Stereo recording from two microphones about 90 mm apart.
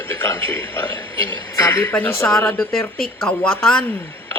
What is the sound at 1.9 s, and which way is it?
Speech, 20° left (ahead or behind).